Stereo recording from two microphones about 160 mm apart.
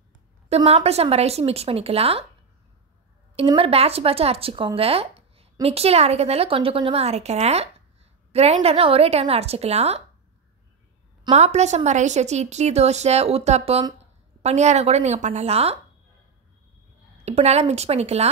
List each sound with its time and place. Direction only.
0.5 s speech: 35° right (ahead or behind)
3.4 s speech: 35° right (ahead or behind)
11.3 s a woman's voice: 45° right (ahead or behind)
17.2 s speech: 40° right (ahead or behind)